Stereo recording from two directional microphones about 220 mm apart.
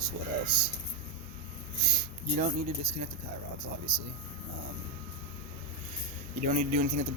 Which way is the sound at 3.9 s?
15° right (ahead or behind).